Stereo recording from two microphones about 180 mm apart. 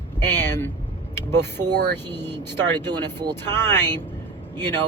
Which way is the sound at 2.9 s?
25° right (ahead or behind).